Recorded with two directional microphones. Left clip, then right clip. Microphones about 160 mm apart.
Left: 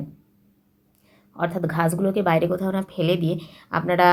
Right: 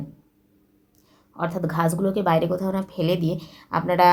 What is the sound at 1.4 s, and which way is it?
A woman's voice, 5° left (ahead or behind).